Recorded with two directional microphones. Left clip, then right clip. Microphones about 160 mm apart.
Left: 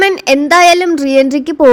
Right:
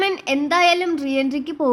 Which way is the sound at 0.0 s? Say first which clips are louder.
Left 11 dB; 35° left (ahead or behind).